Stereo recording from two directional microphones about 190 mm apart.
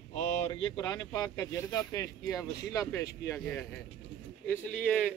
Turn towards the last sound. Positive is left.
turn(degrees=5)  # may be behind; listen again after turning